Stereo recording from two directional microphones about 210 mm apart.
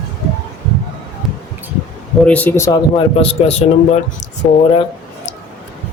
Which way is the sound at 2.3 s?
10° left (ahead or behind).